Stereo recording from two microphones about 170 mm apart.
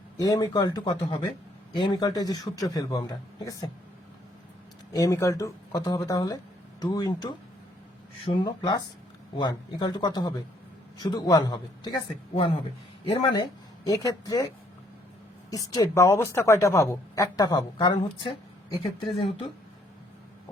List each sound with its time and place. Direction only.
0.2 s a man's voice: 20° left (ahead or behind)
4.9 s a man's voice: 20° left (ahead or behind)
15.4 s a woman's voice: 20° left (ahead or behind)